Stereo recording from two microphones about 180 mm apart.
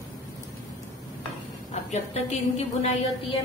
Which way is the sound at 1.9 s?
40° left (ahead or behind).